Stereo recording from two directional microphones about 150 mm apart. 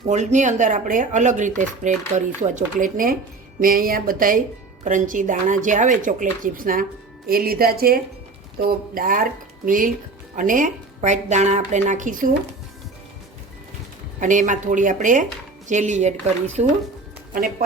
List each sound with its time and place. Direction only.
0.1 s speech: 50° right (ahead or behind); by 4.4 s 65° right (ahead or behind)
4.8 s speech: 55° right (ahead or behind)
7.3 s speech: 80° right; by 12.3 s 60° right (ahead or behind)
14.2 s speech: 55° right (ahead or behind)